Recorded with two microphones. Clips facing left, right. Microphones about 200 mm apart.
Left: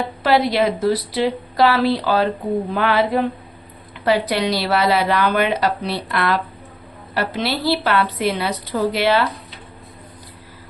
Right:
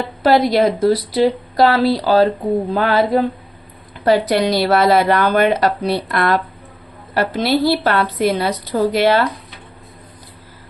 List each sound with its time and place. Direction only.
0.2 s a woman's voice: 45° right (ahead or behind)